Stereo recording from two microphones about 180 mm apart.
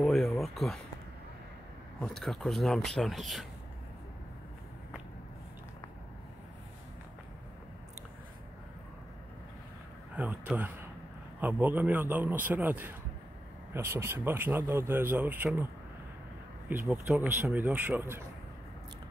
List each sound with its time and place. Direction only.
0.0 s a sound: centre (ahead or behind)
2.0 s speech: centre (ahead or behind)
10.1 s a man's voice: 10° right (ahead or behind)
16.6 s speech: 10° right (ahead or behind)